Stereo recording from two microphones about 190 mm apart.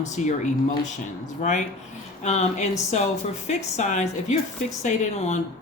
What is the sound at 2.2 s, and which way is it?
Speech, 35° left (ahead or behind).